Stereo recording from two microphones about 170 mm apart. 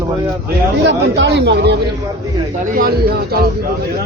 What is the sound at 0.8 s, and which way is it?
Speech, 90° right.